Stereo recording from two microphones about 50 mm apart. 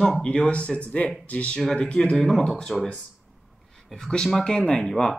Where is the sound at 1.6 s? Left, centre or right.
Centre.